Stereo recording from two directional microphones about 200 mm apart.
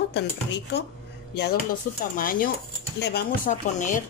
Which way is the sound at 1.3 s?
50° left (ahead or behind).